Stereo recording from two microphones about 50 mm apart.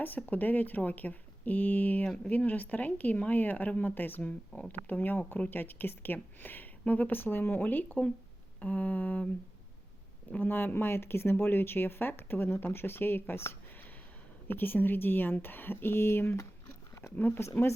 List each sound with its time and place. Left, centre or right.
0.2 s speech: left
7.2 s speech: left
10.4 s speech: left
14.4 s speech: left
17.2 s speech: left